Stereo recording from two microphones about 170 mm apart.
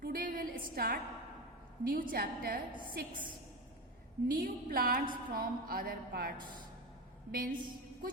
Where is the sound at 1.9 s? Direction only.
60° right (ahead or behind).